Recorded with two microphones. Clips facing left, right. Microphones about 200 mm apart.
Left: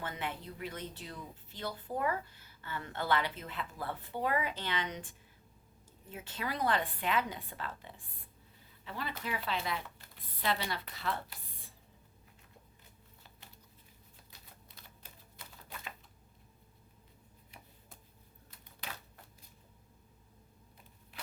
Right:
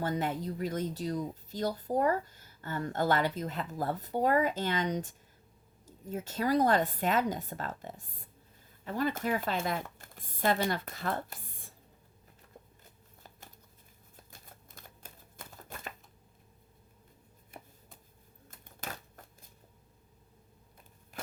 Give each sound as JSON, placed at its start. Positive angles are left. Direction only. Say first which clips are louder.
{"t": 0.0, "sound": "speech", "louder": "right 8 dB", "side_deg": -40}
{"t": 14.3, "sound": "typewriter", "louder": "right 2 dB", "side_deg": -45}
{"t": 17.5, "sound": "a sound", "louder": "right 8 dB", "side_deg": -50}
{"t": 18.5, "sound": "typewriter", "louder": "right 4 dB", "side_deg": -45}